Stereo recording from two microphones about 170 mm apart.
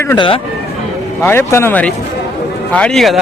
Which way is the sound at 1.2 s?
15° left (ahead or behind).